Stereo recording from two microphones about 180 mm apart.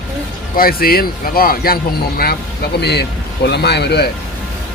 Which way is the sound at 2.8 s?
65° left (ahead or behind).